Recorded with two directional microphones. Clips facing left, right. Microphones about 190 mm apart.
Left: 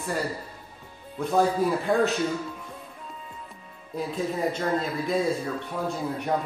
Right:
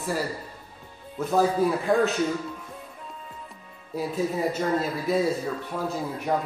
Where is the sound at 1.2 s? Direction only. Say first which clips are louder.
Right 1 dB; centre (ahead or behind).